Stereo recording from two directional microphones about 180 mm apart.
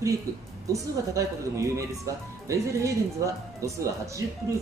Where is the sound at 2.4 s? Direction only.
15° right (ahead or behind).